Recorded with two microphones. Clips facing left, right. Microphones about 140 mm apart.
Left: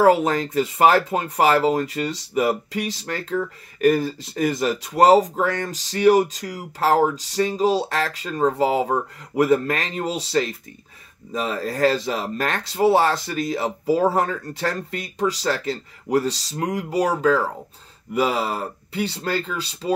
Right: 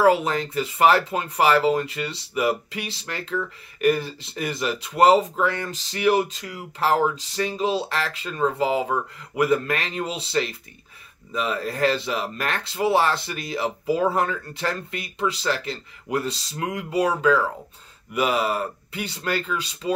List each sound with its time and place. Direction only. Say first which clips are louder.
0.0 s speech: left 2 dB; 40° left (ahead or behind)